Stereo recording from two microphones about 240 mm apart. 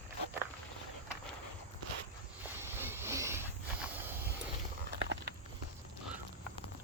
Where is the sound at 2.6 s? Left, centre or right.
Centre.